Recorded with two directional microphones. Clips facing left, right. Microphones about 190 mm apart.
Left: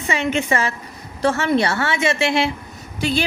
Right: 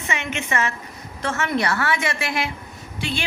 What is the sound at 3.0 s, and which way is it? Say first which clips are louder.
Speech: left 7 dB; 40° left (ahead or behind).